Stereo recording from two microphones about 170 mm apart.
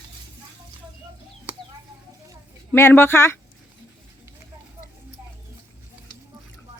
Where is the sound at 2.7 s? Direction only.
15° left (ahead or behind).